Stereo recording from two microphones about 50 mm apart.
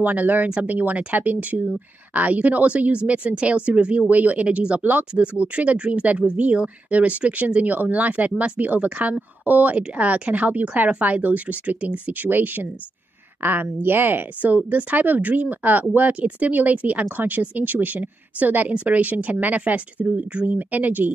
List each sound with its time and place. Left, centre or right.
0.0 s speech: right